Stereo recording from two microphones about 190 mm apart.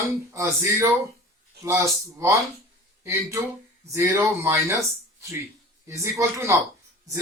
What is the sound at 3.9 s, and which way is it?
Speech, 15° right (ahead or behind).